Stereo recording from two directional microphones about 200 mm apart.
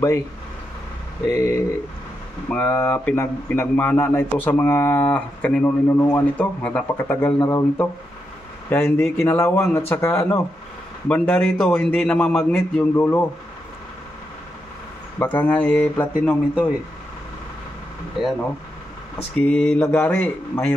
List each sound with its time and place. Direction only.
2.5 s a man's voice: 10° left (ahead or behind)
15.1 s a man's voice: 10° left (ahead or behind)
18.2 s a man's voice: 5° right (ahead or behind)
19.3 s speech: 5° left (ahead or behind)